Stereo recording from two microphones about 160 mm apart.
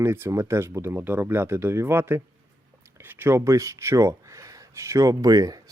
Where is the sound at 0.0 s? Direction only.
15° right (ahead or behind).